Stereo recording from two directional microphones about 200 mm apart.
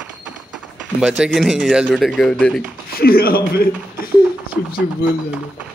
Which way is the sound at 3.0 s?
50° left (ahead or behind).